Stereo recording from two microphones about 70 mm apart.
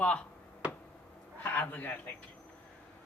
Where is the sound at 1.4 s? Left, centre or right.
Left.